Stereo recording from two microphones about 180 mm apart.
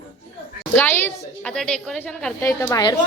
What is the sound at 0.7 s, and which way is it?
A woman's voice, 10° left (ahead or behind).